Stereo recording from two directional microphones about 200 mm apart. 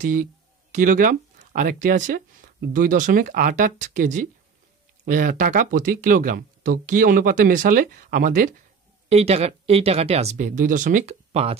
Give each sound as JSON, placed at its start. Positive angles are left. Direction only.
{"t": 0.0, "sound": "speech", "side_deg": -45}
{"t": 10.3, "sound": "speech", "side_deg": -40}